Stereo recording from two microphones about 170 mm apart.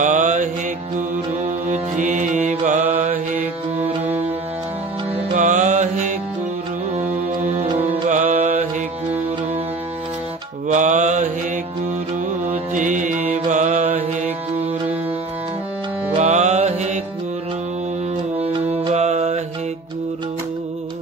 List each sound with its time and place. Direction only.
0.0 s music: 45° right (ahead or behind)
3.8 s music: 10° right (ahead or behind)
5.3 s music: 45° right (ahead or behind)
8.1 s music: 45° right (ahead or behind)
10.7 s mantra: 45° right (ahead or behind)
12.4 s music: 45° right (ahead or behind)
16.2 s music: 40° right (ahead or behind)
18.1 s music: 35° right (ahead or behind)